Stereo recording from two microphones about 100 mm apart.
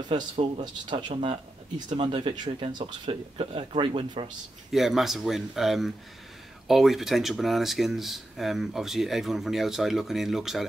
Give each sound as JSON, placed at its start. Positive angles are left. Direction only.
{"t": 0.1, "sound": "speech", "side_deg": -55}
{"t": 2.8, "sound": "speech", "side_deg": -65}
{"t": 4.7, "sound": "speech", "side_deg": -5}